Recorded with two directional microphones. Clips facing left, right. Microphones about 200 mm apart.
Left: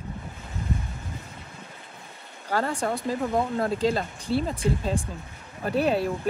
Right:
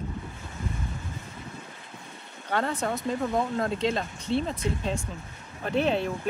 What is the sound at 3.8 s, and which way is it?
Speech, 35° left (ahead or behind).